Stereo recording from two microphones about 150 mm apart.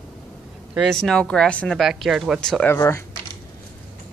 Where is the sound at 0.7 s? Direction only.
Centre (ahead or behind).